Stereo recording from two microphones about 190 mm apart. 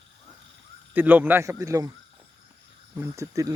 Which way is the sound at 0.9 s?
10° right (ahead or behind).